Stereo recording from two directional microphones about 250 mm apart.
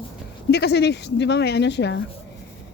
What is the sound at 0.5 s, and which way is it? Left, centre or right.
Speech, left.